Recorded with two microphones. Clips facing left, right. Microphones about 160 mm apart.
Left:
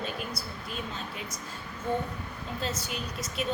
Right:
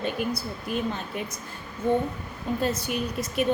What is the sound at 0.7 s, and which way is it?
Speech, 60° right (ahead or behind).